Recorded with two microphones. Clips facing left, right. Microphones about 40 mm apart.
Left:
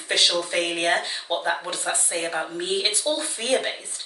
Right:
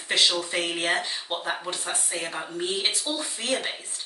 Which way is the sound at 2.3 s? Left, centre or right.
Centre.